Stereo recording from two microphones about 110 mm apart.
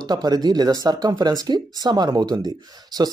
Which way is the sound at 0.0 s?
35° right (ahead or behind).